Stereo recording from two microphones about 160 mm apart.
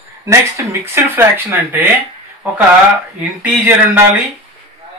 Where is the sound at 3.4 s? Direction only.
10° right (ahead or behind).